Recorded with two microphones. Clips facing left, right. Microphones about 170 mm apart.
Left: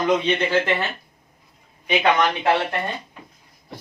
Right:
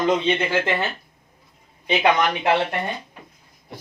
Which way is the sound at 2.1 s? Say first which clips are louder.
Even; 15° right (ahead or behind).